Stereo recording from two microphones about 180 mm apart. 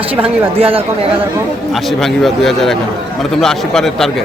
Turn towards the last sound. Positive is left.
turn(degrees=0)  # may be behind; listen again after turning